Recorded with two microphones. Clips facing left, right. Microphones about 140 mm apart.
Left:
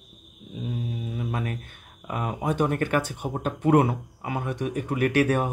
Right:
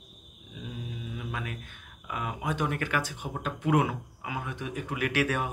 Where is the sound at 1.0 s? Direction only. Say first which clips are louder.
Left 5 dB; 40° left (ahead or behind).